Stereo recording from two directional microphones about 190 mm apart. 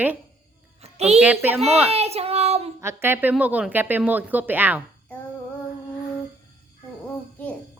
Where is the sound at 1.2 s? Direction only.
10° right (ahead or behind).